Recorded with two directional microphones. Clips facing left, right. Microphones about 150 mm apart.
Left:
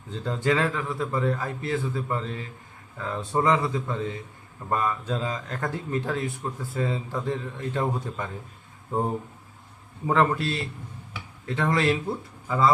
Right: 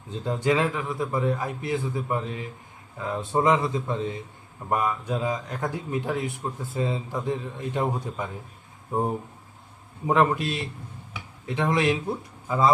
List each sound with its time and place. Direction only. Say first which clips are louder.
0.1 s speech: right 1 dB; 20° right (ahead or behind)
10.1 s speech: right 1 dB; 15° right (ahead or behind)